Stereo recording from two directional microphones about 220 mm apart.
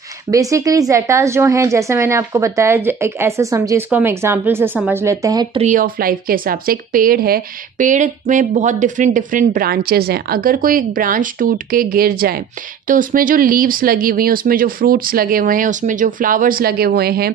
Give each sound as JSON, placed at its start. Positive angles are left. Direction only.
{"t": 0.3, "sound": "a woman's voice", "side_deg": -15}
{"t": 5.7, "sound": "speech", "side_deg": -40}